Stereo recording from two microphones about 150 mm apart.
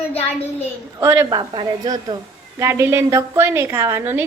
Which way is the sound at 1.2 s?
30° right (ahead or behind).